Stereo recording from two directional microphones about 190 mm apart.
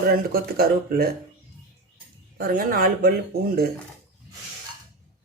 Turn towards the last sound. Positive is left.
turn(degrees=-50)  # may be behind; listen again after turning